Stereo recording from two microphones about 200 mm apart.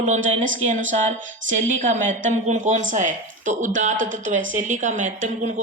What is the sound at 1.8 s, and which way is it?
A woman's voice, 40° right (ahead or behind).